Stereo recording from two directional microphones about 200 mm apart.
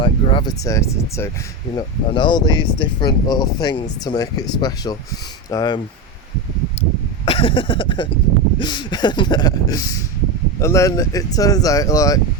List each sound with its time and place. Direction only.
0.0 s speech: 25° left (ahead or behind)
7.3 s speech: 25° left (ahead or behind)